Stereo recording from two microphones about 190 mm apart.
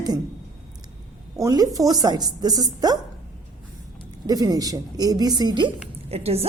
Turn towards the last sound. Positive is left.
turn(degrees=-30)  # may be behind; listen again after turning